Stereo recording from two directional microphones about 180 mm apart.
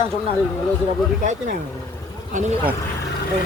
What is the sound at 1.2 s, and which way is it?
Speech, 45° right (ahead or behind).